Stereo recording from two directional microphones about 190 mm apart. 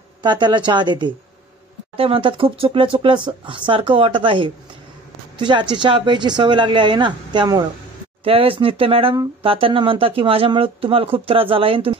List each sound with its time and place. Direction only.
0.2 s speech: 25° right (ahead or behind)